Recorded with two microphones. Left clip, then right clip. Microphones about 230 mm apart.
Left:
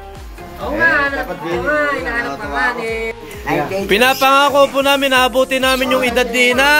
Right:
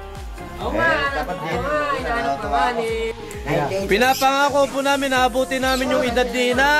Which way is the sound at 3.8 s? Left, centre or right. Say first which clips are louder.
Left 6 dB; centre.